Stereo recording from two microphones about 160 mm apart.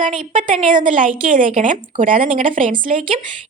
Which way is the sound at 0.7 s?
55° right (ahead or behind).